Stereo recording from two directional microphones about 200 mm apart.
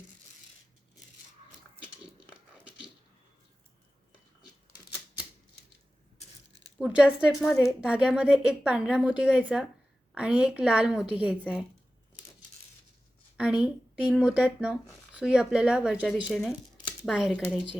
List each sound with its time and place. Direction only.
6.7 s a woman's voice: 5° right (ahead or behind)
7.5 s a woman's voice: 15° left (ahead or behind)
7.8 s a woman's voice: 5° right (ahead or behind)
13.3 s a woman's voice: 5° right (ahead or behind)